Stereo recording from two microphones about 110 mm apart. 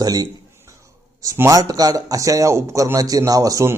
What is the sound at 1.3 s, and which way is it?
A man's voice, 30° right (ahead or behind).